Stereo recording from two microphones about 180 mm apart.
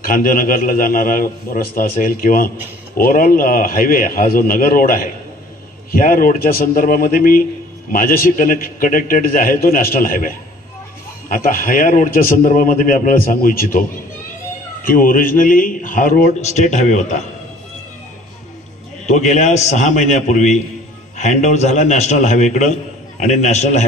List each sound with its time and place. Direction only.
0.0 s a man's voice: 50° left (ahead or behind)
19.0 s a man's voice: 40° left (ahead or behind)